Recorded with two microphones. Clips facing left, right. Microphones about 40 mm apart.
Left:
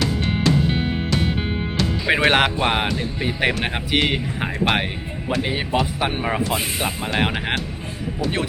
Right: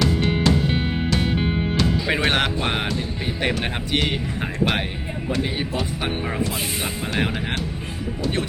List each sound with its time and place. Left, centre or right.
0.0 s music: centre
2.0 s speech: centre
5.4 s speech: centre
6.1 s speech: left
7.3 s speech: left
8.2 s speech: centre